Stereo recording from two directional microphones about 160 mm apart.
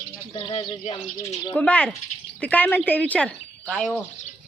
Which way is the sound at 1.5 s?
10° left (ahead or behind).